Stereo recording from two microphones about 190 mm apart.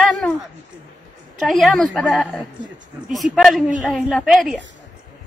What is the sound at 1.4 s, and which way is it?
Speech, centre (ahead or behind).